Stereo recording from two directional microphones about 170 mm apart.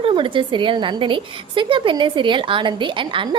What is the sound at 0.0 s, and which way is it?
A woman's voice, 30° right (ahead or behind).